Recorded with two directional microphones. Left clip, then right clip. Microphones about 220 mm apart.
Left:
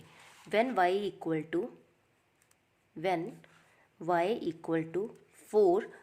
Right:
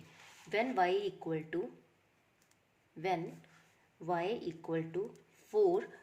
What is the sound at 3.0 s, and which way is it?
Speech, 30° left (ahead or behind).